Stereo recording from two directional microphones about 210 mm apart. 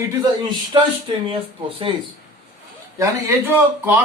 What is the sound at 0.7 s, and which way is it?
Speech, 25° right (ahead or behind).